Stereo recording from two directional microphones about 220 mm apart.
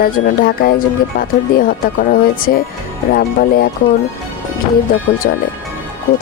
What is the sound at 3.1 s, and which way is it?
Speech, 40° left (ahead or behind).